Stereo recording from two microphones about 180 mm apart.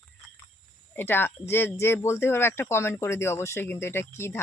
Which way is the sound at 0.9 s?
10° left (ahead or behind).